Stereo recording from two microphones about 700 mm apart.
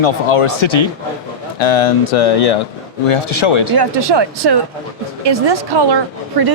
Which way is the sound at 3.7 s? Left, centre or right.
Right.